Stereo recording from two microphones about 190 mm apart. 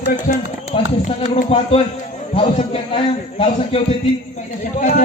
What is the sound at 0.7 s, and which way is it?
A man's voice, 30° left (ahead or behind).